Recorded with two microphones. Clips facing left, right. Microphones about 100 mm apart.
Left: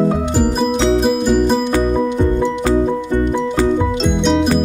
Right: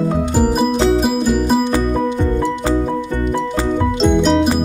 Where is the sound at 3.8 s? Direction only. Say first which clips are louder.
Right 2 dB; centre (ahead or behind).